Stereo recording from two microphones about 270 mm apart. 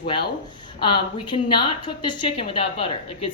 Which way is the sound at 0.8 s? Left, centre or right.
Centre.